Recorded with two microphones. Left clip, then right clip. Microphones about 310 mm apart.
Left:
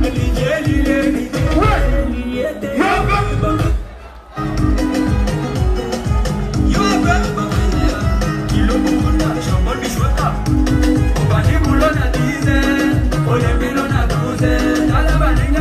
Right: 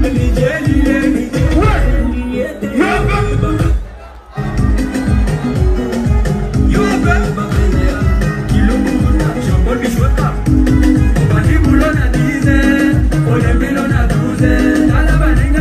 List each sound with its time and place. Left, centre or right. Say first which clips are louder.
0.0 s music: right 4 dB; centre
2.8 s music: right 1 dB; left
6.7 s music: right 1 dB; centre
8.6 s music: even; centre
10.6 s music: right 3 dB; centre